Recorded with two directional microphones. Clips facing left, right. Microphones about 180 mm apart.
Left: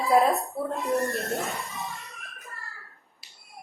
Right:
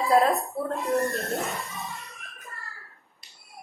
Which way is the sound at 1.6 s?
Centre (ahead or behind).